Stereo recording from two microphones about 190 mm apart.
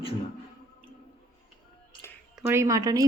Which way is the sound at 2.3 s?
15° right (ahead or behind).